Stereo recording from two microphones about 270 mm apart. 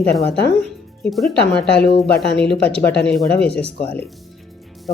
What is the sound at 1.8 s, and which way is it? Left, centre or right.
Speech, left.